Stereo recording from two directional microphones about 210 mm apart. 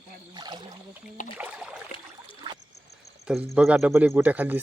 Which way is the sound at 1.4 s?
5° right (ahead or behind).